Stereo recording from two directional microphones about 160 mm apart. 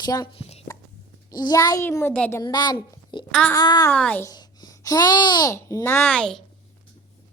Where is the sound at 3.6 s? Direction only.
25° left (ahead or behind).